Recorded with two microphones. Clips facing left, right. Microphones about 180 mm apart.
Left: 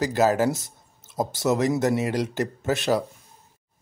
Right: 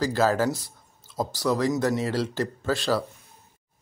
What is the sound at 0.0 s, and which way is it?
Speech, 20° left (ahead or behind).